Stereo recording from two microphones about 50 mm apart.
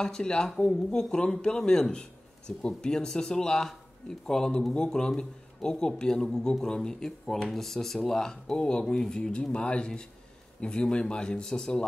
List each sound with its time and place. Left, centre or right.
0.0 s speech: centre